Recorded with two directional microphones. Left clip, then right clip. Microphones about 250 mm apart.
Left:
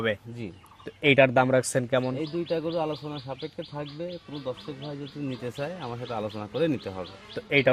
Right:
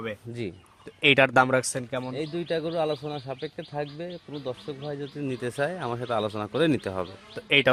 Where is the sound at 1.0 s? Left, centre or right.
Centre.